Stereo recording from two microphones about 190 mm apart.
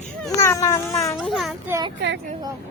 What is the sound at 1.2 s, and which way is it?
Speech, centre (ahead or behind).